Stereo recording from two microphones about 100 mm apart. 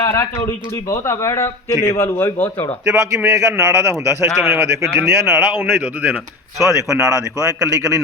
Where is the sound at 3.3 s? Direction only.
30° right (ahead or behind).